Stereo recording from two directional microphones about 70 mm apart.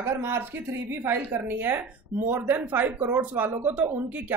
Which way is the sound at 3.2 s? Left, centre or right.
Right.